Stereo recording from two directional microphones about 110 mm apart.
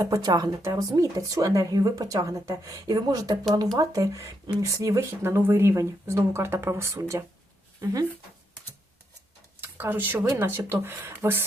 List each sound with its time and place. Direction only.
0.0 s speech: 35° right (ahead or behind)
9.6 s speech: 20° right (ahead or behind)